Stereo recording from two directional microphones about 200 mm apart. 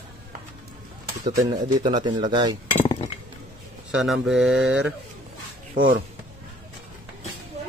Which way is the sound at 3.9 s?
Centre (ahead or behind).